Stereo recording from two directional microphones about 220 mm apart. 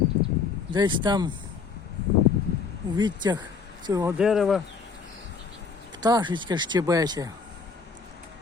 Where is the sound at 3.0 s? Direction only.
20° right (ahead or behind).